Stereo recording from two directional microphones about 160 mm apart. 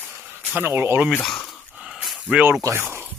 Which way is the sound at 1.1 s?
5° left (ahead or behind).